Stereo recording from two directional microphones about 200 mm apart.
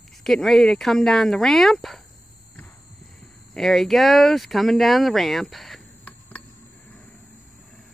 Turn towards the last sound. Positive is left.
turn(degrees=5)  # may be behind; listen again after turning